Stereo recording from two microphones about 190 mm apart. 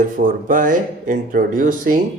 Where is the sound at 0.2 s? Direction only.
45° right (ahead or behind).